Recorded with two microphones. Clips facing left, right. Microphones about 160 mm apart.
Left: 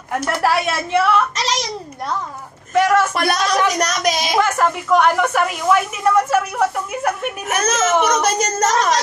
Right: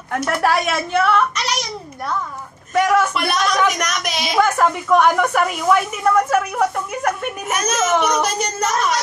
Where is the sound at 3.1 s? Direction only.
35° left (ahead or behind).